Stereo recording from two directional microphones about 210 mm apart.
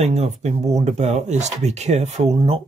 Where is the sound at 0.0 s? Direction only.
30° right (ahead or behind).